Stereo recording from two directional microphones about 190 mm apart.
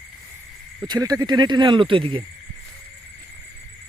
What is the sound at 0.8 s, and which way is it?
Speech, 20° right (ahead or behind).